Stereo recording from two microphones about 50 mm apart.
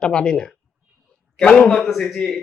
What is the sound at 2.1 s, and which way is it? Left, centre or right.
Speech, centre.